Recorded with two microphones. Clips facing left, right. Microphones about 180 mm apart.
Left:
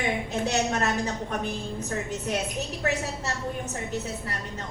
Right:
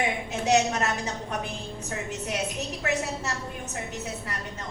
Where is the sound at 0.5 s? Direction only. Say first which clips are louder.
Right 5 dB; 35° left (ahead or behind).